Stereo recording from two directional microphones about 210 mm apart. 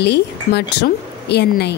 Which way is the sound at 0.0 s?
55° left (ahead or behind).